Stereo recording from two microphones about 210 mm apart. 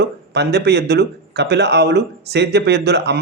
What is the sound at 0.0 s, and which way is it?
Speech, 55° right (ahead or behind).